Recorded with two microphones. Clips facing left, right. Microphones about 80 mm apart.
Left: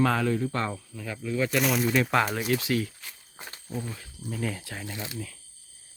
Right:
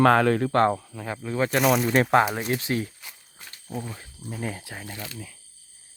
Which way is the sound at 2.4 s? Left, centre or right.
Right.